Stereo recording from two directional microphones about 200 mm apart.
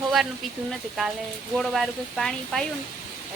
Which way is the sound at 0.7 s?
Centre (ahead or behind).